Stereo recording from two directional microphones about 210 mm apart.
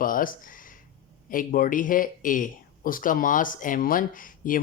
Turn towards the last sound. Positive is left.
turn(degrees=40)  # may be behind; listen again after turning